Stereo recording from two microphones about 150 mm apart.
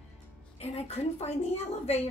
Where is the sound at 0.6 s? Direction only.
45° left (ahead or behind).